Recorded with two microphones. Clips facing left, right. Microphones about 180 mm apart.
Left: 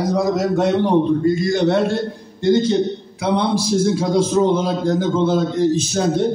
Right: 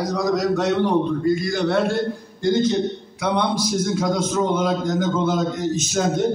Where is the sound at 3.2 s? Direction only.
30° left (ahead or behind).